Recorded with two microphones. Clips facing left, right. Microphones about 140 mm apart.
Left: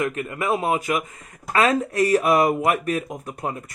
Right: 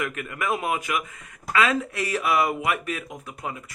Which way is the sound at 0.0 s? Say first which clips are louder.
Left 4 dB; 30° left (ahead or behind).